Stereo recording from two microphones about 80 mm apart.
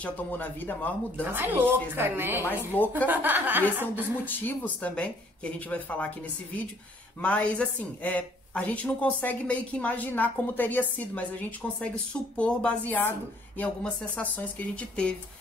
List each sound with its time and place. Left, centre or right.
0.0 s speech: left
1.2 s a woman's voice: right
2.4 s speech: left
3.1 s a woman's voice: right
4.3 s speech: left